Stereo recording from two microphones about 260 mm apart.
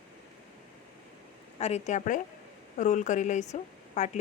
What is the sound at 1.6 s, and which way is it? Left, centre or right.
A woman's voice, left.